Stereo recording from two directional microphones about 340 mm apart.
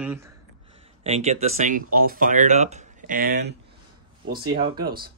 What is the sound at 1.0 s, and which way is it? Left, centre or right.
Speech, centre.